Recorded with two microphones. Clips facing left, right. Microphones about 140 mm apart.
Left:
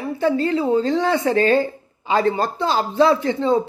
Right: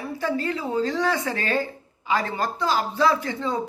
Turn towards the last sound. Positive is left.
turn(degrees=25)  # may be behind; listen again after turning